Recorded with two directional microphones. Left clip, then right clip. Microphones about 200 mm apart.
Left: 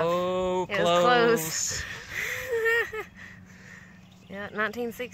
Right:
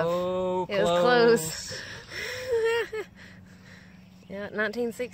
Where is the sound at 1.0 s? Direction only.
30° right (ahead or behind).